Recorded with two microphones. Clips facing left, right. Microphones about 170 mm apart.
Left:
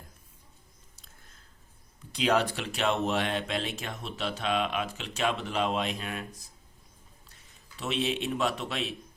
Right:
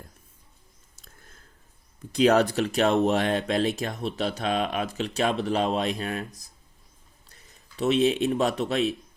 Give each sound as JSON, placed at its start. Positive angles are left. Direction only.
{"t": 2.1, "sound": "a man's voice", "side_deg": -45}